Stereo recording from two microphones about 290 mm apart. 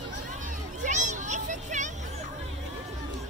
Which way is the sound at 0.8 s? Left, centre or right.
Right.